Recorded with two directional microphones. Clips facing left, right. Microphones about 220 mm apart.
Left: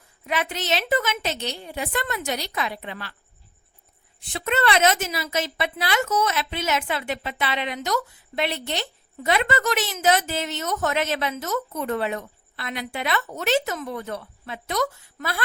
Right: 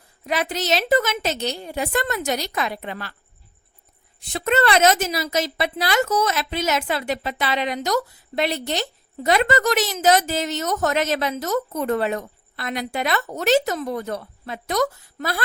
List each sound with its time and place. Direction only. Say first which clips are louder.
0.3 s a woman's voice: right 3 dB; 40° right (ahead or behind)
4.2 s a woman's voice: right 4 dB; 40° right (ahead or behind)